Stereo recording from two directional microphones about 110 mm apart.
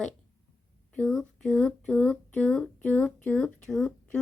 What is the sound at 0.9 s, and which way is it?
Speech, 5° left (ahead or behind).